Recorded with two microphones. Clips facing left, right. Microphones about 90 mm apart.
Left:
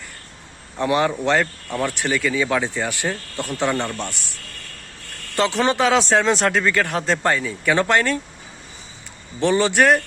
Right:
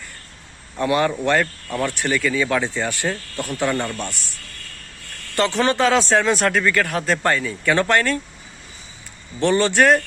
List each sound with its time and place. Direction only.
0.8 s a man's voice: 20° left (ahead or behind)
5.4 s speech: 20° left (ahead or behind)
9.4 s speech: 15° left (ahead or behind)